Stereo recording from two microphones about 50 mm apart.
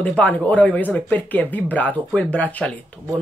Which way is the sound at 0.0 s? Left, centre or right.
Left.